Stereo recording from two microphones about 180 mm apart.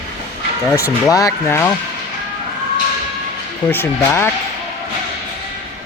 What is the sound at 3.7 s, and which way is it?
Speech, 15° left (ahead or behind).